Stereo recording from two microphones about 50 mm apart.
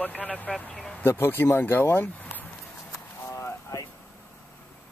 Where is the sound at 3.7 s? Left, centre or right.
Left.